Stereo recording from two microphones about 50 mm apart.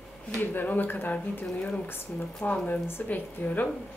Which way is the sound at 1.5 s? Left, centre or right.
Left.